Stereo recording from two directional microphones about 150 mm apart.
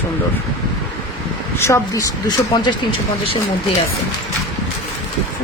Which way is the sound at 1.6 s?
20° left (ahead or behind).